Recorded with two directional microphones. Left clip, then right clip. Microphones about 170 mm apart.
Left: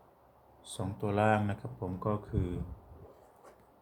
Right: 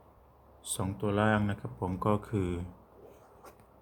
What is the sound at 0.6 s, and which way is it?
Speech, 35° right (ahead or behind).